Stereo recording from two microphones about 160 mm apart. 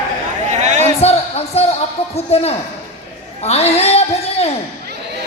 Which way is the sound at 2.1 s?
40° left (ahead or behind).